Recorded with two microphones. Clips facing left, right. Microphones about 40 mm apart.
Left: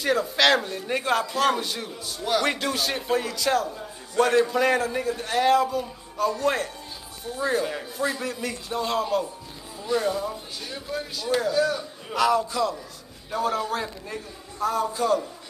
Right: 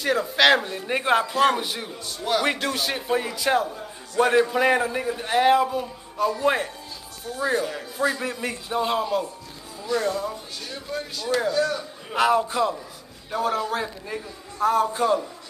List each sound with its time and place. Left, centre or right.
0.0 s a man's voice: centre
2.0 s a man's voice: centre
7.3 s speech: centre
8.2 s a man's voice: right
8.7 s a man's voice: centre
9.0 s a man's voice: centre
10.0 s speech: centre
12.1 s a man's voice: right
13.3 s a man's voice: centre
14.6 s a man's voice: right